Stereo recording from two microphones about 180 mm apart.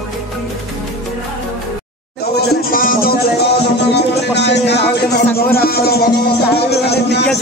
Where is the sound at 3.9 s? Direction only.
70° left (ahead or behind).